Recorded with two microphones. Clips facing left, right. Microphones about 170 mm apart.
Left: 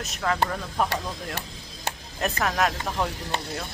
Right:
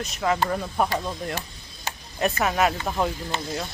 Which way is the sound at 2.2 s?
5° right (ahead or behind).